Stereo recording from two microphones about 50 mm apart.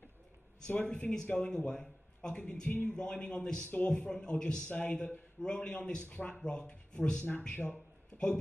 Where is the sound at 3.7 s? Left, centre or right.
Left.